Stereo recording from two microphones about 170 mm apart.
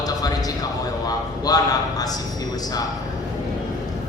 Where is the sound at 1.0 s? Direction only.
20° left (ahead or behind).